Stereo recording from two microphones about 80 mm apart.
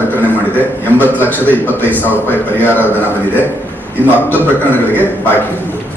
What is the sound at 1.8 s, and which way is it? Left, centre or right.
Speech, right.